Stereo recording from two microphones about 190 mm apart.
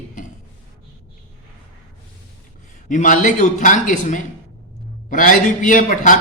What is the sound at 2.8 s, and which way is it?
A man's voice, 40° left (ahead or behind).